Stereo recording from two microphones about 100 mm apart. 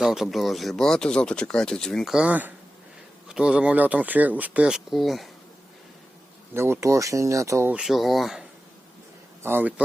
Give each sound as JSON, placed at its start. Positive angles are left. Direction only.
{"t": 0.0, "sound": "speech", "side_deg": -5}
{"t": 2.1, "sound": "speech", "side_deg": -15}
{"t": 6.5, "sound": "speech", "side_deg": -25}
{"t": 7.7, "sound": "speech", "side_deg": -5}
{"t": 9.4, "sound": "a man's voice", "side_deg": -20}